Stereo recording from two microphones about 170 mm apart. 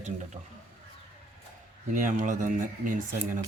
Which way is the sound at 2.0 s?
50° right (ahead or behind).